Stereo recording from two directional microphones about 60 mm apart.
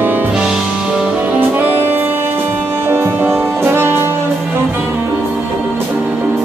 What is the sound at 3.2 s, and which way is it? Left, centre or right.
Brass instrument, right.